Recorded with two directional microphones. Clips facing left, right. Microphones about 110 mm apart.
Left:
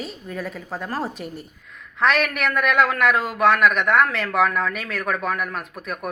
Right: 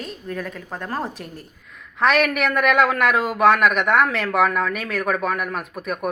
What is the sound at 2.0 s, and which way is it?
Speech, 10° right (ahead or behind).